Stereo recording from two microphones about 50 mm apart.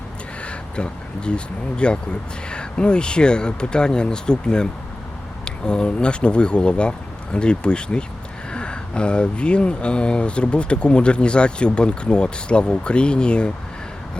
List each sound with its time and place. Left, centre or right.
0.4 s speech: left